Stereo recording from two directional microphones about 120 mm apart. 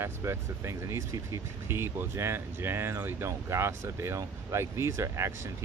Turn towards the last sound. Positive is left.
turn(degrees=-25)  # may be behind; listen again after turning